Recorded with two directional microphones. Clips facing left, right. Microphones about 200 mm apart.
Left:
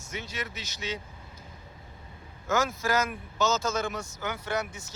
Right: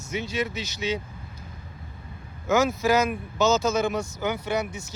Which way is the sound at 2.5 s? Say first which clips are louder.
Right 6 dB; 10° right (ahead or behind).